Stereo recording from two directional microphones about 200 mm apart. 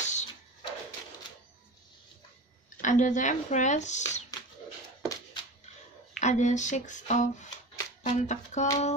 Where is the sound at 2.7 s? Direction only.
40° left (ahead or behind).